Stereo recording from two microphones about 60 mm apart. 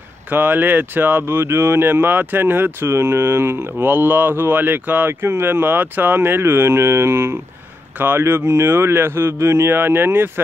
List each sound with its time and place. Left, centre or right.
0.3 s speech: right
1.2 s speech: right